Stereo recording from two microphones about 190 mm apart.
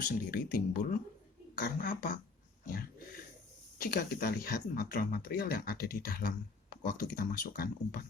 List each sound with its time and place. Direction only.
0.0 s speech: 50° left (ahead or behind)
3.9 s speech: 50° left (ahead or behind)